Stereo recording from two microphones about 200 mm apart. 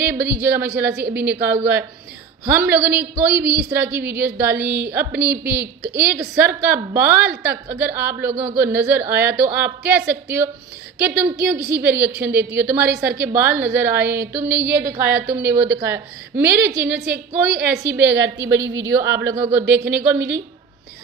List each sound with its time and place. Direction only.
0.0 s a woman's voice: 10° right (ahead or behind)
11.3 s a woman's voice: 50° right (ahead or behind)
12.0 s a woman's voice: 10° right (ahead or behind)
12.9 s a woman's voice: 50° right (ahead or behind)
13.3 s a woman's voice: 10° right (ahead or behind)
17.9 s a woman's voice: 60° right (ahead or behind)
18.8 s a woman's voice: 15° right (ahead or behind)